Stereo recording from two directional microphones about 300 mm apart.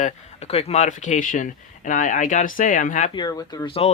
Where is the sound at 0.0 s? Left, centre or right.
Left.